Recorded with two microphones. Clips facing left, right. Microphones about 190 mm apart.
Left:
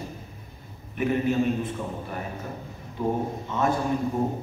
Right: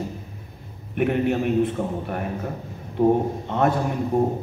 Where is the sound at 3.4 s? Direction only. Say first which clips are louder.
Right 4 dB; 65° right (ahead or behind).